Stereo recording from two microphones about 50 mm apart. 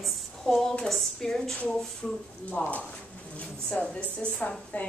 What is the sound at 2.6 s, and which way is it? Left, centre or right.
Speech, left.